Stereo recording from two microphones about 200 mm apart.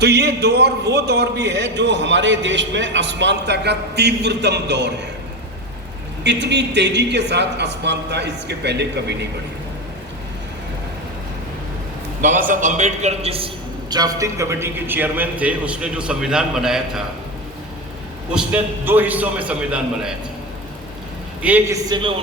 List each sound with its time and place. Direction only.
0.0 s a man's voice: 55° right (ahead or behind)
6.2 s a man's voice: 60° right (ahead or behind)
12.2 s a man's voice: 40° right (ahead or behind)
13.9 s a man's voice: 20° right (ahead or behind); by 17.0 s 5° right (ahead or behind)
18.3 s a man's voice: 5° right (ahead or behind)
21.4 s a man's voice: 10° right (ahead or behind)
21.8 s a woman's voice: 20° right (ahead or behind)